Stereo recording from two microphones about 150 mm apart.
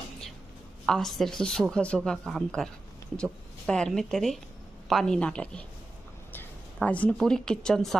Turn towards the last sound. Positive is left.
turn(degrees=5)  # may be behind; listen again after turning